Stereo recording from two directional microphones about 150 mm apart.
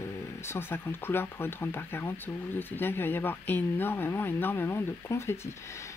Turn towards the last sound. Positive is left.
turn(degrees=20)  # may be behind; listen again after turning